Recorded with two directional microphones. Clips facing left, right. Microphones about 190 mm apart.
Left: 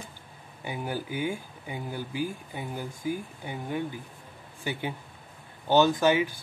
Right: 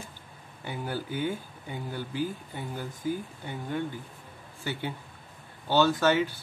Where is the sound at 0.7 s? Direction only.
15° left (ahead or behind).